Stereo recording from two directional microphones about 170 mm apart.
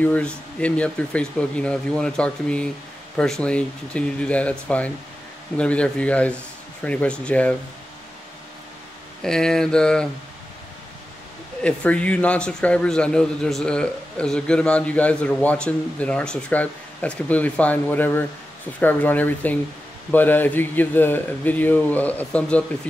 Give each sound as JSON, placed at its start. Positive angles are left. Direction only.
{"t": 0.0, "sound": "a man's voice", "side_deg": 10}
{"t": 9.2, "sound": "mantra", "side_deg": 5}
{"t": 11.6, "sound": "a man's voice", "side_deg": 5}